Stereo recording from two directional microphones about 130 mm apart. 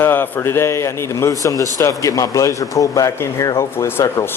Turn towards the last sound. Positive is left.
turn(degrees=20)  # may be behind; listen again after turning